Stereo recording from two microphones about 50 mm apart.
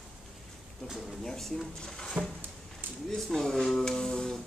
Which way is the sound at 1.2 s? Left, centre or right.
Centre.